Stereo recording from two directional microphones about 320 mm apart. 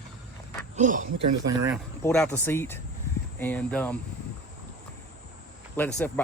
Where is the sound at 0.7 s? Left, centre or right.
Right.